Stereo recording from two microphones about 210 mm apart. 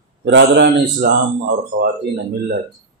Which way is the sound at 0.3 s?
55° right (ahead or behind).